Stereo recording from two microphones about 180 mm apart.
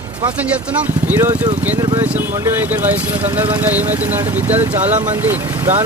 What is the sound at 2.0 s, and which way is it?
Speech, 10° right (ahead or behind).